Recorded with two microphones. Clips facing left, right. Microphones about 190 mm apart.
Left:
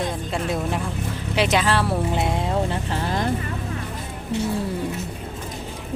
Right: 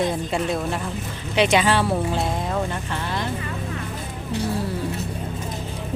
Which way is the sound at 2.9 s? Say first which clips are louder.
Left 3 dB; 40° left (ahead or behind).